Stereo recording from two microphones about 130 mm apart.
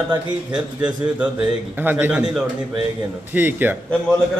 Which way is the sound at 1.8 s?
15° right (ahead or behind).